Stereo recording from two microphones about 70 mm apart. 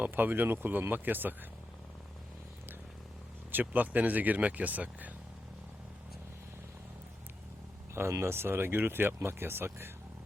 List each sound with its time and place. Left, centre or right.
0.0 s speech: right
3.5 s speech: right
7.9 s speech: right